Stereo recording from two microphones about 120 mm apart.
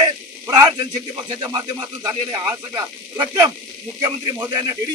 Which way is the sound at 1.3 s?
35° right (ahead or behind).